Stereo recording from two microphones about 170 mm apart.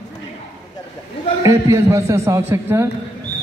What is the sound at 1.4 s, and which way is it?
A man's voice, 15° right (ahead or behind).